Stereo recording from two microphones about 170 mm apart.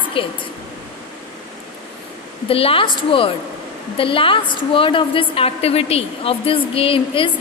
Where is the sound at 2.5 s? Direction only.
35° left (ahead or behind).